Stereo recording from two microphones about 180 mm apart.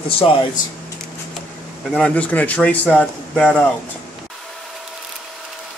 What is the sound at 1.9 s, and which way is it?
A man's voice, 5° left (ahead or behind).